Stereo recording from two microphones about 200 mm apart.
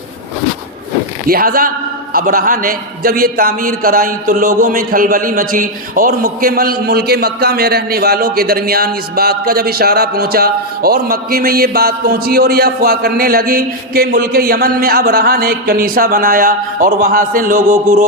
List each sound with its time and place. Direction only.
1.3 s a man's voice: 50° right (ahead or behind)